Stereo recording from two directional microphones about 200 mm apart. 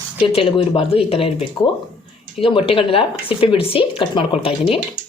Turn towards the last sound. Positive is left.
turn(degrees=25)  # may be behind; listen again after turning